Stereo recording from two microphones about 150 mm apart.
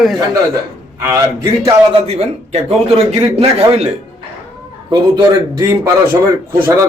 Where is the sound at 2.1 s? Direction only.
40° right (ahead or behind).